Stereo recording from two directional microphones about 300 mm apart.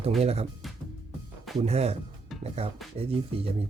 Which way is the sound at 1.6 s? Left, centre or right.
Right.